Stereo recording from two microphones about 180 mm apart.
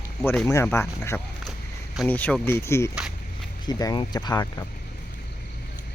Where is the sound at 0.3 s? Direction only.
15° left (ahead or behind).